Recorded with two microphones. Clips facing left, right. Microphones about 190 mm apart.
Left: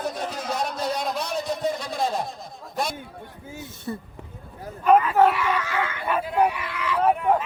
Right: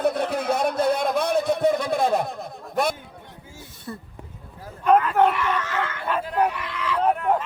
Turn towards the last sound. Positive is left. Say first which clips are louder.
# left 1 dB
turn(degrees=5)  # may be behind; listen again after turning